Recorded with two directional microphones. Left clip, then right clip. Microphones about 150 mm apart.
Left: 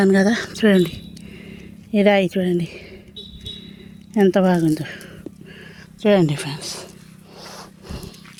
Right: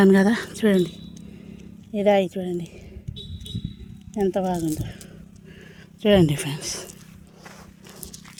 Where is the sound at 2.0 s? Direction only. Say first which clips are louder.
Left 3 dB; 30° left (ahead or behind).